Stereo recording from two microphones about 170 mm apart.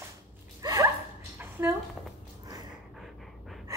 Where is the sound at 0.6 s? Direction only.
20° right (ahead or behind).